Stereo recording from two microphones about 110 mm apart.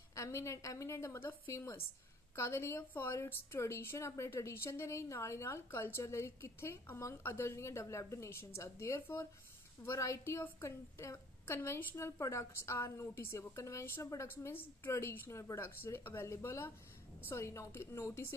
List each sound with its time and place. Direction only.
0.1 s a woman's voice: 25° left (ahead or behind)